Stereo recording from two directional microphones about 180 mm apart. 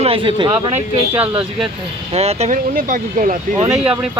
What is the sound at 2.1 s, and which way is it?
Speech, 35° right (ahead or behind).